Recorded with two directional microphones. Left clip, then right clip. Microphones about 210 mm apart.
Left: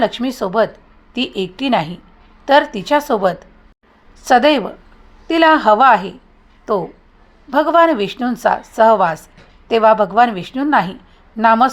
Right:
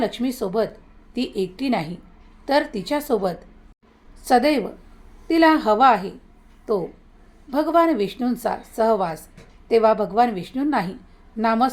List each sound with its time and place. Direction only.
0.0 s a woman's voice: 10° left (ahead or behind)